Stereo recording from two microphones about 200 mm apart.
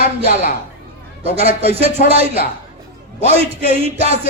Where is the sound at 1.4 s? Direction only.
30° right (ahead or behind).